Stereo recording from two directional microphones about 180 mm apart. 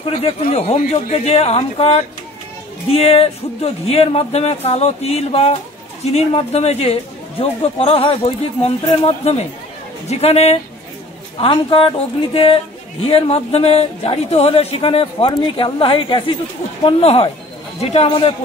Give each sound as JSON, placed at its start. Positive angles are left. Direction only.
{"t": 0.2, "sound": "a man's voice", "side_deg": 35}
{"t": 13.0, "sound": "a man's voice", "side_deg": 35}